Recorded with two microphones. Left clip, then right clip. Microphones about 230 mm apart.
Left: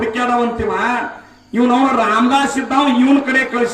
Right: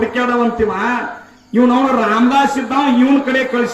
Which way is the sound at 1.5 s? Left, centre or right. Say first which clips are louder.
Right 1 dB; left.